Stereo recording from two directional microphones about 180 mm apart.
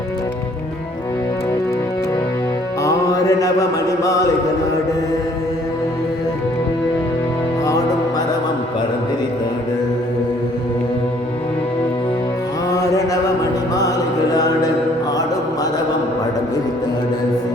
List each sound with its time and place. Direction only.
2.8 s music: 20° left (ahead or behind)
12.7 s mantra: 20° left (ahead or behind)
13.4 s music: 20° left (ahead or behind)